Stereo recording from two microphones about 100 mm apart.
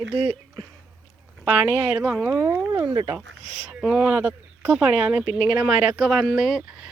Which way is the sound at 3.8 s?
5° right (ahead or behind).